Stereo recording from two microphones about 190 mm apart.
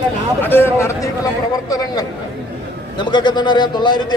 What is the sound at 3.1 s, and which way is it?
Speech, 25° left (ahead or behind).